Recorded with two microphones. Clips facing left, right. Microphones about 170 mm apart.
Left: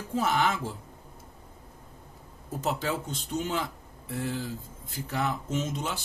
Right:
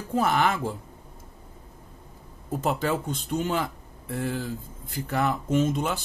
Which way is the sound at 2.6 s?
55° right (ahead or behind).